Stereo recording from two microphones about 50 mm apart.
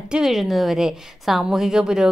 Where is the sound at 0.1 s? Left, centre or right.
Centre.